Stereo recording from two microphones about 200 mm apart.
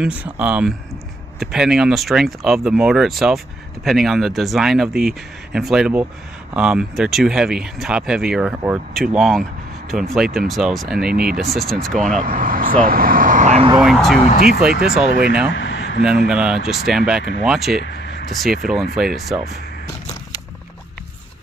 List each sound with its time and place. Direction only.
0.0 s speech: 5° right (ahead or behind)
12.2 s speech: 45° right (ahead or behind)
13.7 s speech: centre (ahead or behind)
14.2 s speech: 35° left (ahead or behind)
14.8 s speech: 5° right (ahead or behind)
15.5 s a sound: 70° left (ahead or behind)
16.0 s speech: 5° right (ahead or behind)